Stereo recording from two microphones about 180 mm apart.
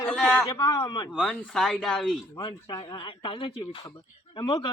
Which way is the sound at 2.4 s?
25° left (ahead or behind).